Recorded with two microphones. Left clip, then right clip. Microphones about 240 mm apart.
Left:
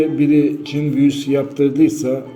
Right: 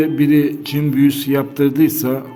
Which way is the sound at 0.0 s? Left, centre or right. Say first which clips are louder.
Even; right.